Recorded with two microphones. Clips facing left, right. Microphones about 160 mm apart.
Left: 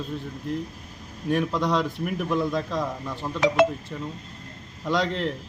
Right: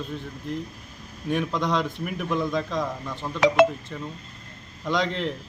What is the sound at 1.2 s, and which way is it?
Speech, 5° left (ahead or behind).